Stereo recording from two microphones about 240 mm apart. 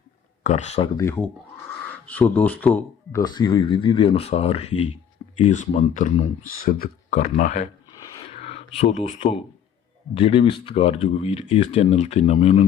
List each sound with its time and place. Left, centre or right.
0.4 s speech: left
0.9 s speech: centre; by 12.6 s left